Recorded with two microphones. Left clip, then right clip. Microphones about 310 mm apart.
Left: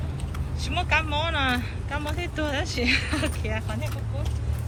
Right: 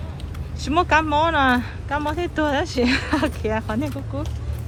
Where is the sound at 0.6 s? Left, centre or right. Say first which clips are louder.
Right 7 dB; centre.